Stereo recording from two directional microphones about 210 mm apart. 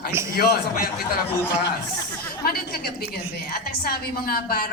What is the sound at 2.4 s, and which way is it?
A woman's voice, 45° left (ahead or behind).